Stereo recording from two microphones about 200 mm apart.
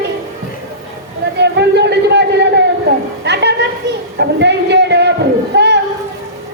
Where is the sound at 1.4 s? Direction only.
60° right (ahead or behind).